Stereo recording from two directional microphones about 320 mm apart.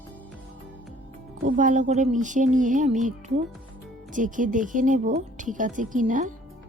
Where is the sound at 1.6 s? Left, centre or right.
Right.